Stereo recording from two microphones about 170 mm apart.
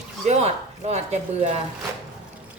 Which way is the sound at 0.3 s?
40° right (ahead or behind).